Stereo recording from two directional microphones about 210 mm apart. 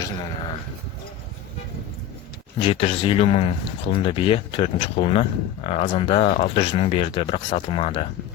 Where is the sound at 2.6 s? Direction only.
25° left (ahead or behind).